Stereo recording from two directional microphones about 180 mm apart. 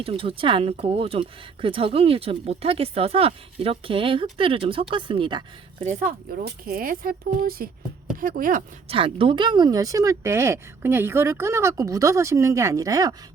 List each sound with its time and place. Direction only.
0.0 s speech: 30° right (ahead or behind)
5.8 s speech: 45° right (ahead or behind)
8.9 s speech: 30° right (ahead or behind)